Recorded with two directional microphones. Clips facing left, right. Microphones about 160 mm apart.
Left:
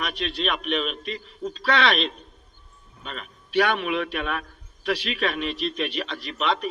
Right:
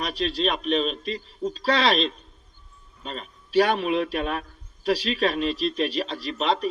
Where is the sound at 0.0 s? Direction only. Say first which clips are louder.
Right 3 dB; 35° right (ahead or behind).